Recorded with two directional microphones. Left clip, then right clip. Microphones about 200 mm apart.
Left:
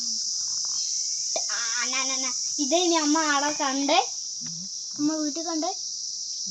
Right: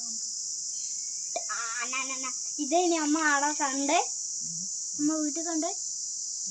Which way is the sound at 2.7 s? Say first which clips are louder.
Left 3 dB; 60° left (ahead or behind).